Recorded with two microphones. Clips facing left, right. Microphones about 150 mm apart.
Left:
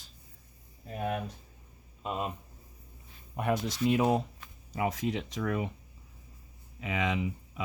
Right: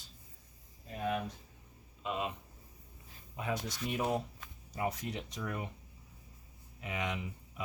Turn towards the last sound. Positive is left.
turn(degrees=90)